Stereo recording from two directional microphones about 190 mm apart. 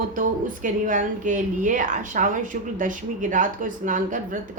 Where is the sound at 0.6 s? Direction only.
45° right (ahead or behind).